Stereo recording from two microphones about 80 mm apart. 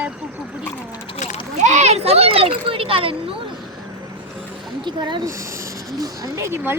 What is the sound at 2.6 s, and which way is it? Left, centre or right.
Speech, right.